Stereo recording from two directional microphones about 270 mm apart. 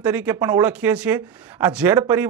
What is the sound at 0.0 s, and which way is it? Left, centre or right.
Speech, centre.